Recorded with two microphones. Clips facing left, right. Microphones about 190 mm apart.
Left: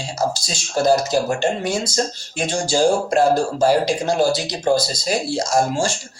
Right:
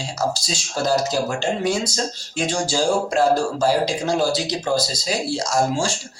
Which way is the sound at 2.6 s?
55° left (ahead or behind).